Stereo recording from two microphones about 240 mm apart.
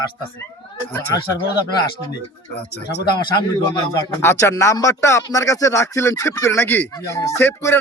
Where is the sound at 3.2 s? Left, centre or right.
Centre.